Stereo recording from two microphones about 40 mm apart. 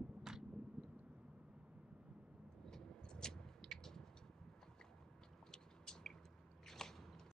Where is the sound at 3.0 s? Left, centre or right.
Centre.